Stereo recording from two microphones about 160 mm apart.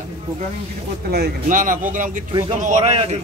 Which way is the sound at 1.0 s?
90° right.